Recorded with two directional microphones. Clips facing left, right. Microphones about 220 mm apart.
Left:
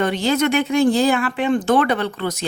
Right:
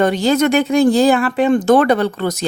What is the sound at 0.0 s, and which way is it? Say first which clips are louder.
Speech: right 4 dB; 40° right (ahead or behind).